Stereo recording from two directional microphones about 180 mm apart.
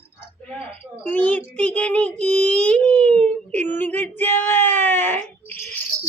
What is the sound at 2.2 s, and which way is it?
Speech, 5° left (ahead or behind).